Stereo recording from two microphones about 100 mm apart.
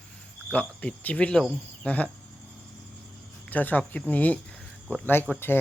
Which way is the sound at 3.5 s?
15° left (ahead or behind).